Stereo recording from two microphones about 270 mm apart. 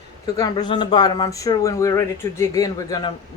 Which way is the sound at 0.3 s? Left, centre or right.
Centre.